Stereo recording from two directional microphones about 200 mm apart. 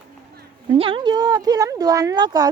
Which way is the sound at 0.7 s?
30° right (ahead or behind).